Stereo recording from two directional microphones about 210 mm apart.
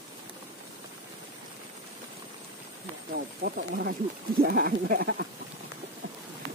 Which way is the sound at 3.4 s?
45° right (ahead or behind).